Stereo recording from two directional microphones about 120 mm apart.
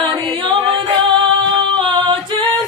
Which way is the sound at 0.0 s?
40° right (ahead or behind).